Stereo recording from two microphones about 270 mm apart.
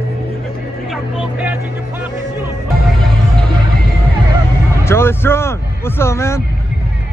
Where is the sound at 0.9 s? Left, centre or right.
Centre.